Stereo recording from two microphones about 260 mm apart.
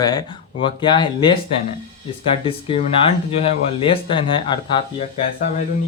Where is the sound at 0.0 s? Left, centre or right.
Centre.